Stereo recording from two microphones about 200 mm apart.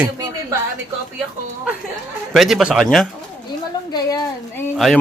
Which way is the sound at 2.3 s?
Centre (ahead or behind).